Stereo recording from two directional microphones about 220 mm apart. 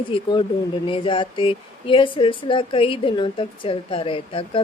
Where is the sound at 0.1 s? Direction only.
20° left (ahead or behind).